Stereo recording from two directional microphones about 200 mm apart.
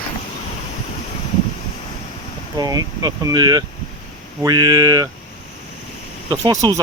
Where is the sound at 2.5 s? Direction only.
20° right (ahead or behind).